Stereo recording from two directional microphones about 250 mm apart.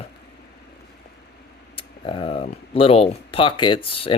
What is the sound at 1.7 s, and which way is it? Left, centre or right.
Speech, left.